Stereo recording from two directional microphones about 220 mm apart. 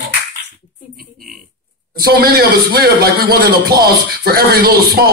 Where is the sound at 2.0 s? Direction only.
45° right (ahead or behind).